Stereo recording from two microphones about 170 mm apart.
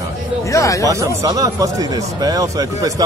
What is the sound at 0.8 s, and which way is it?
Speech, 20° right (ahead or behind).